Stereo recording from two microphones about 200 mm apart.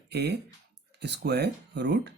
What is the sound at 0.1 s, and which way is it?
Speech, 55° right (ahead or behind).